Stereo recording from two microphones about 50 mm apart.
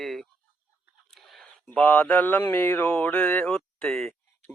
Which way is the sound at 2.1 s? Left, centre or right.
Left.